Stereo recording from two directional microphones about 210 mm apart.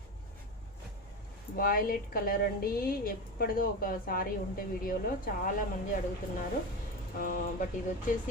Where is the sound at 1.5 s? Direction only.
45° left (ahead or behind).